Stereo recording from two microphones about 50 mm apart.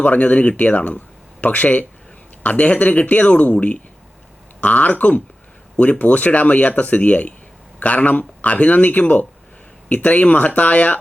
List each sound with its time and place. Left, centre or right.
0.0 s speech: left